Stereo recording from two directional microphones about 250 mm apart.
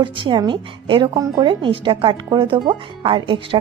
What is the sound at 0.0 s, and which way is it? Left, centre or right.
A woman's voice, centre.